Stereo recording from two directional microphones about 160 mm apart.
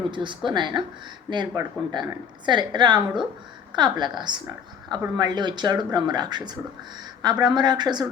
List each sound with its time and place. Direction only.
0.1 s a woman's voice: 30° right (ahead or behind)